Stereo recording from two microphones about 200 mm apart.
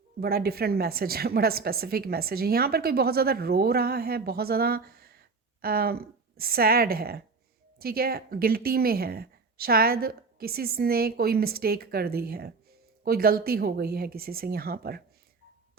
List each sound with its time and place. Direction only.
0.2 s a woman's voice: 50° right (ahead or behind)